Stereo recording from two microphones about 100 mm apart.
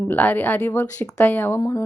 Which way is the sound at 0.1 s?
20° left (ahead or behind).